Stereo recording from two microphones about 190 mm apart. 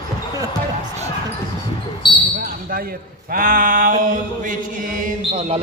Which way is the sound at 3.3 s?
50° right (ahead or behind).